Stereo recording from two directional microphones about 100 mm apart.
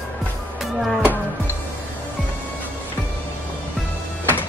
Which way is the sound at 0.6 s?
Centre (ahead or behind).